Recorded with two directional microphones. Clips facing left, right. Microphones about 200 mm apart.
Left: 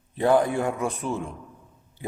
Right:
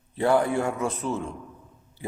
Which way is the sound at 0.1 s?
15° left (ahead or behind).